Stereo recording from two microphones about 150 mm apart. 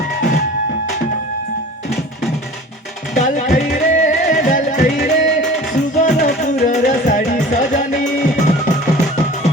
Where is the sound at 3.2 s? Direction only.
55° left (ahead or behind); by 5.0 s 70° left (ahead or behind).